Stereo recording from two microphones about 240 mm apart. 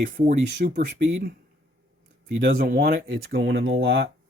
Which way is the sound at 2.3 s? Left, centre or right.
Right.